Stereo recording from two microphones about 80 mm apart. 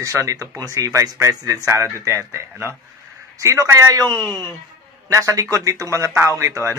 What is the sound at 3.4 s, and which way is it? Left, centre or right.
Speech, right.